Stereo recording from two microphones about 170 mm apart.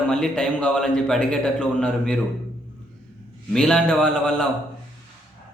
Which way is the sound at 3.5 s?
5° left (ahead or behind).